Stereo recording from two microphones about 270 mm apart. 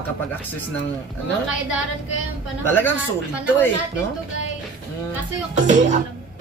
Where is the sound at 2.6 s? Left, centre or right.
Centre.